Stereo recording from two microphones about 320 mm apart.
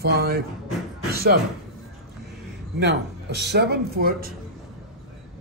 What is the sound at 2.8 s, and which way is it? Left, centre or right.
Speech, right.